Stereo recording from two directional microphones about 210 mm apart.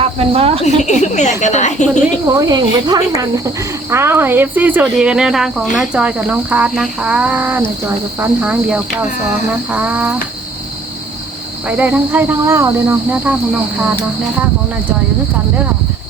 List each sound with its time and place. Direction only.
0.0 s speech: 30° right (ahead or behind)
0.6 s a sound: 35° left (ahead or behind)
2.2 s speech: 15° right (ahead or behind)
11.8 s speech: 10° right (ahead or behind)